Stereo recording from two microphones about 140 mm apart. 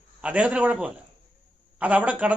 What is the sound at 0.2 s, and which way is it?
A man's voice, 10° right (ahead or behind).